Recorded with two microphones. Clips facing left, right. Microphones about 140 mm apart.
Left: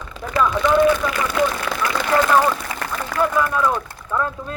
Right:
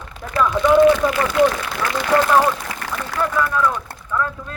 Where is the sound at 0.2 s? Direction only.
Centre (ahead or behind).